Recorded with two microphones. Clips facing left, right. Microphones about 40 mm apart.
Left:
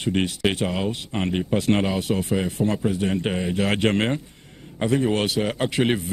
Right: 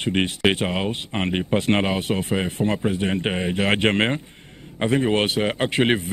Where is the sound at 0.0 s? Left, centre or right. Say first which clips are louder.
Right 2 dB; right.